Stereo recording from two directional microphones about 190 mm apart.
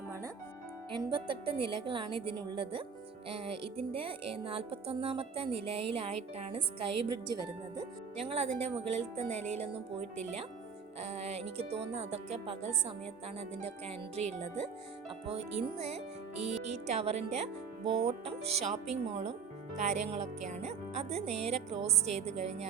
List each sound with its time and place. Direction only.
0.9 s music: 25° right (ahead or behind)
8.1 s speech: 30° right (ahead or behind)
11.0 s speech: 35° right (ahead or behind)